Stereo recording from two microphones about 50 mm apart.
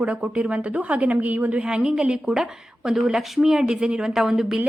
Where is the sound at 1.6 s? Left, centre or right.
Centre.